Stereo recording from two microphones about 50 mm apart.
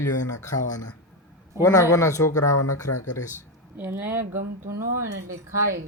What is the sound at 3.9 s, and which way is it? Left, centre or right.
Speech, right.